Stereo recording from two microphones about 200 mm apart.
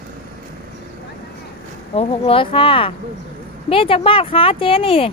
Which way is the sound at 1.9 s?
30° left (ahead or behind).